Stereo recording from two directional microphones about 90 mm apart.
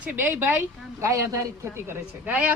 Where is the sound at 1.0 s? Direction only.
35° right (ahead or behind).